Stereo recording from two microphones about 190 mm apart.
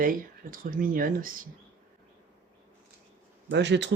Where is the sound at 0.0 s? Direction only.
45° right (ahead or behind).